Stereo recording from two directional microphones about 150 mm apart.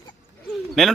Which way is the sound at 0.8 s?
Centre (ahead or behind).